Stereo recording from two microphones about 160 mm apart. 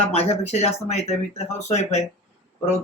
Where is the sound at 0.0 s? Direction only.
40° left (ahead or behind).